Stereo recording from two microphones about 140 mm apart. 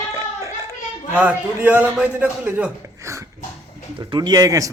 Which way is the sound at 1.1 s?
10° right (ahead or behind).